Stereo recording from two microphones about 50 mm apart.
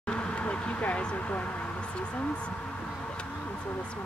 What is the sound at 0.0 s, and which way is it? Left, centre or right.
Vehicle, left.